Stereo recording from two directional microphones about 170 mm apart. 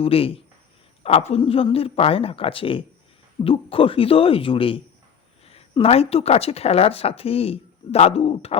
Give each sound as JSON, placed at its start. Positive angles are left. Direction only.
{"t": 0.0, "sound": "speech", "side_deg": 35}